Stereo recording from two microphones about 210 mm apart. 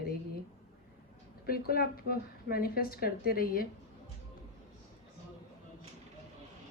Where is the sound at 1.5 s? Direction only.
45° left (ahead or behind).